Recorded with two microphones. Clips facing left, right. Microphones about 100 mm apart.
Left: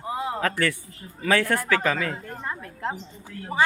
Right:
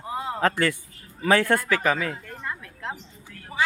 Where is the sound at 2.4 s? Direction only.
35° left (ahead or behind).